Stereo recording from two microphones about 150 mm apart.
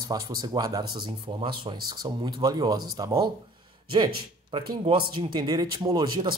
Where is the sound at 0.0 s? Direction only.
25° right (ahead or behind).